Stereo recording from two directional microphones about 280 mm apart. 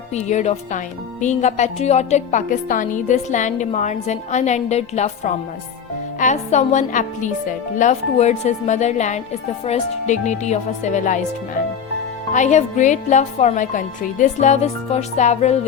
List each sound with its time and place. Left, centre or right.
0.1 s a woman's voice: left
12.3 s a woman's voice: left